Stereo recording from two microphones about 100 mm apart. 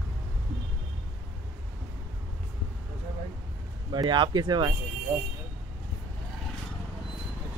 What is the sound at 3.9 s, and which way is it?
Speech, 50° right (ahead or behind).